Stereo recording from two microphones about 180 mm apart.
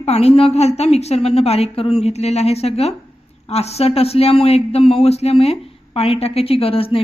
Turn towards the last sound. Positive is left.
turn(degrees=30)  # may be behind; listen again after turning